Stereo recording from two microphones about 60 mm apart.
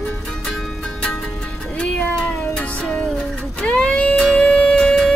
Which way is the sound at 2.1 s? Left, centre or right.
Centre.